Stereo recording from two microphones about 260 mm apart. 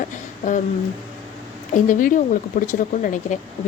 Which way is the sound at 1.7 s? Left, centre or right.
Left.